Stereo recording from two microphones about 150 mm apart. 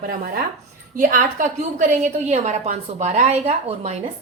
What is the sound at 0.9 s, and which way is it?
A woman's voice, 60° right (ahead or behind).